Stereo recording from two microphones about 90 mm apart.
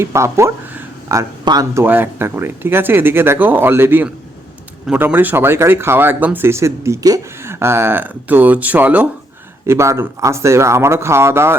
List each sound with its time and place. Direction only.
0.0 s speech: 30° right (ahead or behind)
1.7 s speech: 25° right (ahead or behind)
9.6 s speech: 35° right (ahead or behind)